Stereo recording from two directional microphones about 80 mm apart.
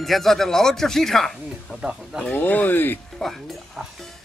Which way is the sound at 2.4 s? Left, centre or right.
Left.